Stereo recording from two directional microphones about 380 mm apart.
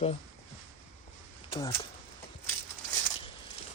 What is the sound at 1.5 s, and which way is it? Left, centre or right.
Speech, centre.